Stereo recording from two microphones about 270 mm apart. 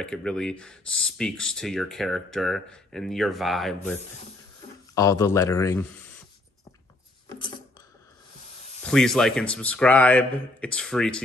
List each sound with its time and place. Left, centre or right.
0.0 s speech: centre
4.9 s speech: centre
7.2 s coin: centre
8.8 s speech: centre